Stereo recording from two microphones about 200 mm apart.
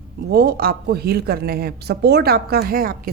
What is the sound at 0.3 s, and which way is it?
Speech, 50° right (ahead or behind).